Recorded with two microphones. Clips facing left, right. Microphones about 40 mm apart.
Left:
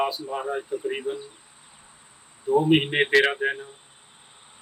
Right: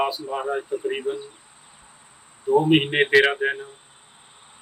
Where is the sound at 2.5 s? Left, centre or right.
Centre.